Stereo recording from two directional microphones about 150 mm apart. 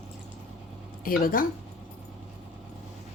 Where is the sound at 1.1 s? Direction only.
70° left (ahead or behind).